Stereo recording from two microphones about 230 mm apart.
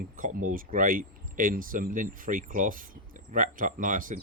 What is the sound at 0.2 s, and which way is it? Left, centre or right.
Speech, right.